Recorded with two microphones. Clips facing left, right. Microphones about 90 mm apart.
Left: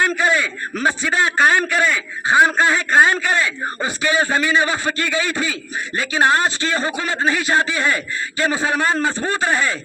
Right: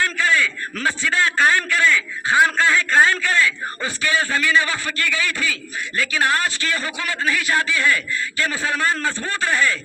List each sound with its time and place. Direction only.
0.0 s a man's voice: 20° left (ahead or behind)